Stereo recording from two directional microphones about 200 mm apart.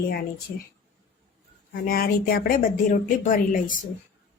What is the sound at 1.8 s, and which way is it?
A woman's voice, 50° left (ahead or behind).